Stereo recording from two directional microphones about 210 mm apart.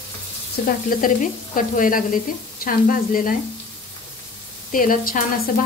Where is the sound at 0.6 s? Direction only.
40° left (ahead or behind).